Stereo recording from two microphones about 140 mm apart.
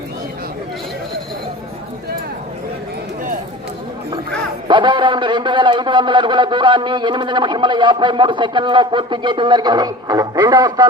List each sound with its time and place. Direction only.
4.7 s a man's voice: 35° right (ahead or behind)